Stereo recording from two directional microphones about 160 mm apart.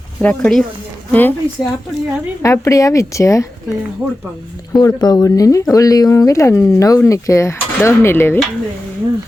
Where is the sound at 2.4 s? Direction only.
20° left (ahead or behind).